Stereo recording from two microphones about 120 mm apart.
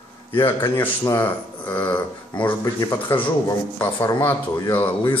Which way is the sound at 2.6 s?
30° left (ahead or behind).